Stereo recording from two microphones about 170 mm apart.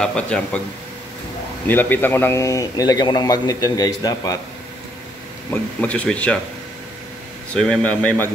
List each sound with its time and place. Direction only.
0.0 s speech: 5° left (ahead or behind)
1.7 s a man's voice: 10° left (ahead or behind)
5.5 s speech: 10° left (ahead or behind)
7.5 s speech: 5° left (ahead or behind)